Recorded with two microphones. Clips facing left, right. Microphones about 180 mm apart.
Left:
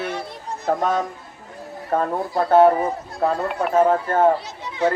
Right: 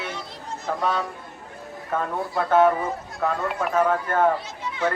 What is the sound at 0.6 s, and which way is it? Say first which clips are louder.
Speech: left 5 dB; 45° left (ahead or behind).